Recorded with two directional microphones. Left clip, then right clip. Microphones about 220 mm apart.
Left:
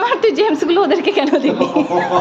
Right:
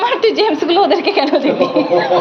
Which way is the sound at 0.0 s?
25° left (ahead or behind).